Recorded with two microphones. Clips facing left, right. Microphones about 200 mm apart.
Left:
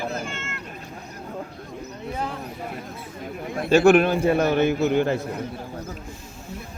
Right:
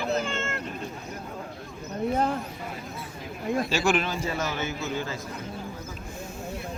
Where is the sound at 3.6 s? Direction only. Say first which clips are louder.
Left 10 dB; 60° left (ahead or behind).